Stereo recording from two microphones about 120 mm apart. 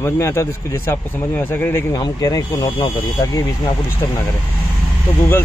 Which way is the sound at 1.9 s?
30° left (ahead or behind).